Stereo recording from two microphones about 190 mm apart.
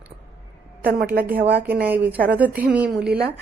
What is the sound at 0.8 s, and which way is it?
Speech, 55° right (ahead or behind).